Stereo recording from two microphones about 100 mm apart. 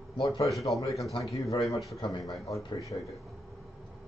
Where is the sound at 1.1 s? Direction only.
35° left (ahead or behind).